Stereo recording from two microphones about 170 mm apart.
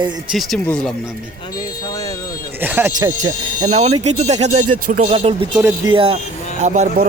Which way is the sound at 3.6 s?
40° right (ahead or behind).